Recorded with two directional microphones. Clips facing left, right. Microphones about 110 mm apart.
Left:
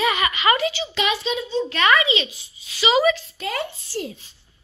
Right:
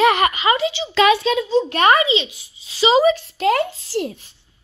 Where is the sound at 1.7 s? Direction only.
45° right (ahead or behind).